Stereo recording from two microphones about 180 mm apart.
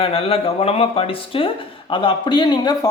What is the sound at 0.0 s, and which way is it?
Speech, 30° left (ahead or behind).